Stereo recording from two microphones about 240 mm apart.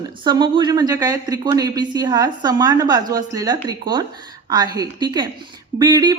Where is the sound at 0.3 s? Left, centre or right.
Centre.